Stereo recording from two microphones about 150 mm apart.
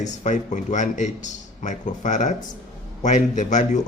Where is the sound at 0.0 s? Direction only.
55° left (ahead or behind).